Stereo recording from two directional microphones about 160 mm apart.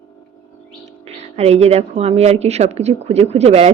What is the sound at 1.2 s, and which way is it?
Speech, 40° right (ahead or behind).